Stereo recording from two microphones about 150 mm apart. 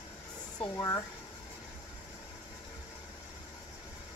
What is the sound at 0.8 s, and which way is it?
Speech, 20° left (ahead or behind).